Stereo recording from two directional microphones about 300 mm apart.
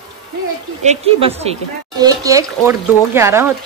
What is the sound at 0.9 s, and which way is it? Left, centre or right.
Speech, centre.